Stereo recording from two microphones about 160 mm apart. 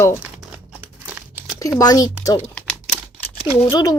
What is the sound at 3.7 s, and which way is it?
Speech, 25° left (ahead or behind).